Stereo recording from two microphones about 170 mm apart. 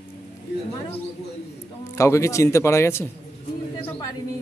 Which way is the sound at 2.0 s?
15° left (ahead or behind).